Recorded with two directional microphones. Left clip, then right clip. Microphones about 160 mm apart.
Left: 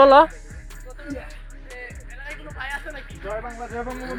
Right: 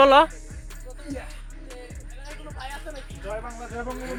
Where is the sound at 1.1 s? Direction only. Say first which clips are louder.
Left 1 dB; centre (ahead or behind).